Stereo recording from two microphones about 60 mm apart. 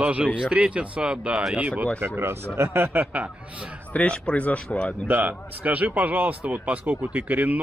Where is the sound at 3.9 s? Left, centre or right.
Centre.